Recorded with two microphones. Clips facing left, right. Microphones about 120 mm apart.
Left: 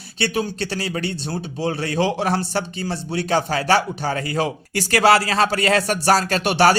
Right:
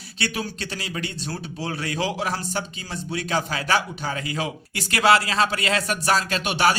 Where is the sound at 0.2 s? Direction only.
30° left (ahead or behind).